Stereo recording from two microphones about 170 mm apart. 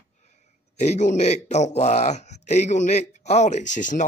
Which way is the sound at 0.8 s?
45° left (ahead or behind).